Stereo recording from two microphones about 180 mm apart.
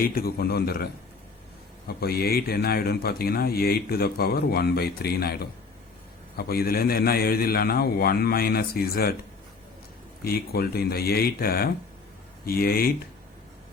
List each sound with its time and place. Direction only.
0.0 s a man's voice: 55° left (ahead or behind)
2.0 s a man's voice: 60° left (ahead or behind)
10.2 s a man's voice: 60° left (ahead or behind)